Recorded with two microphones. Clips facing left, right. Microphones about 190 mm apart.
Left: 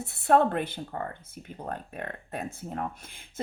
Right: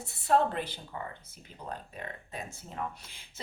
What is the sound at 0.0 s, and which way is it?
Speech, 60° left (ahead or behind).